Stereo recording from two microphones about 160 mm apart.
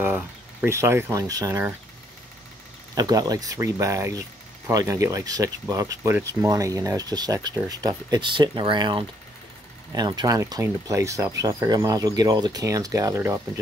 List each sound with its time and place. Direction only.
0.0 s speech: 10° right (ahead or behind)
2.9 s speech: 25° right (ahead or behind)